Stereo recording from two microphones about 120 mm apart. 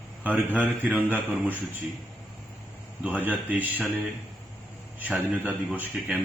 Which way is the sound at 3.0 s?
15° right (ahead or behind).